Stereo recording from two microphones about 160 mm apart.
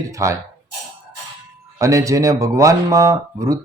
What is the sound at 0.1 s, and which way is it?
Speech, 20° right (ahead or behind).